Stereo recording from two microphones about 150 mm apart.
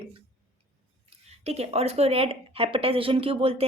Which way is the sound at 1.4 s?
45° right (ahead or behind).